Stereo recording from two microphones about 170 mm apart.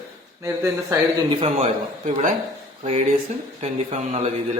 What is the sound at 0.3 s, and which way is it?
Speech, 15° right (ahead or behind).